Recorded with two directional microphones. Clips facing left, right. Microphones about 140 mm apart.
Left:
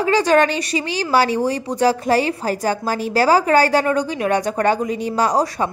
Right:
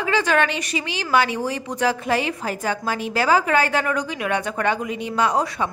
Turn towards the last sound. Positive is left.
turn(degrees=40)  # may be behind; listen again after turning